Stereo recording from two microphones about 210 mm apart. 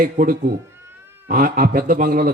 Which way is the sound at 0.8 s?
10° right (ahead or behind).